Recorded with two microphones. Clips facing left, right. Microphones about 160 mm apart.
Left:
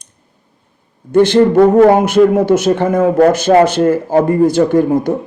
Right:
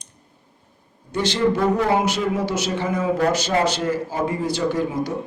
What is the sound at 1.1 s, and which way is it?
A man's voice, 55° left (ahead or behind).